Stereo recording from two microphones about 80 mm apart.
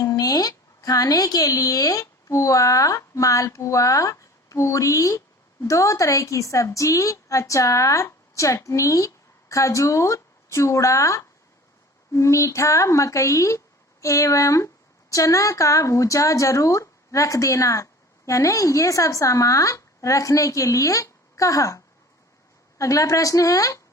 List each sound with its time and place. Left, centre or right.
0.0 s a woman's voice: left
22.8 s speech: left